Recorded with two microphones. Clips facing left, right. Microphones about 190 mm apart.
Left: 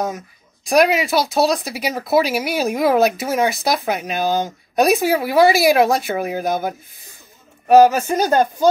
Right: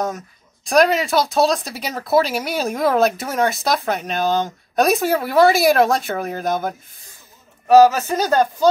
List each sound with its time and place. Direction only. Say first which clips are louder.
0.7 s speech: even; 10° left (ahead or behind)